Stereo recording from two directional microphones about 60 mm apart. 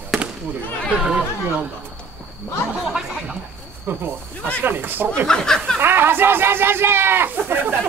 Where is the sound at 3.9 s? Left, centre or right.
Right.